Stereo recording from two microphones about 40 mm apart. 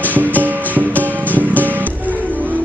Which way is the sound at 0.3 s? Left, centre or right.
Right.